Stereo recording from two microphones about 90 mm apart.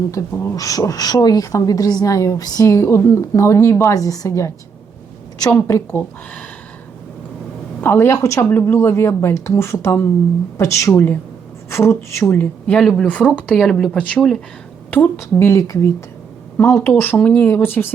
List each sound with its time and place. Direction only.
0.2 s a woman's voice: 40° left (ahead or behind)
3.9 s a woman's voice: 40° left (ahead or behind)
7.8 s a woman's voice: 25° left (ahead or behind)
15.2 s a woman's voice: 30° left (ahead or behind); by 17.4 s 15° left (ahead or behind)
17.4 s a woman's voice: 25° left (ahead or behind)